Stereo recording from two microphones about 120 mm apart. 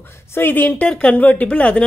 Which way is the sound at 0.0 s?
20° left (ahead or behind).